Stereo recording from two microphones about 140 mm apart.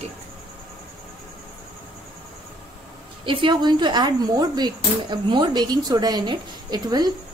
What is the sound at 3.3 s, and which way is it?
Speech, 35° right (ahead or behind).